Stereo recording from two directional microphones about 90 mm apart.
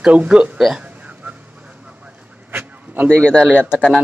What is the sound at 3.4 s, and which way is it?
Speech, 15° right (ahead or behind).